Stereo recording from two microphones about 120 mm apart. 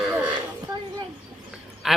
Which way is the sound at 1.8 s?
Centre (ahead or behind).